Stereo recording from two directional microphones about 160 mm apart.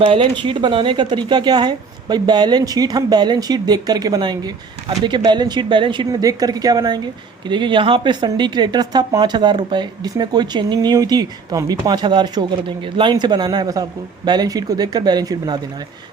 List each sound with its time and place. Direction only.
0.0 s speech: 35° right (ahead or behind)